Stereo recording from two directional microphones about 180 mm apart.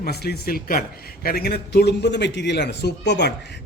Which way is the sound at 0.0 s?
65° left (ahead or behind).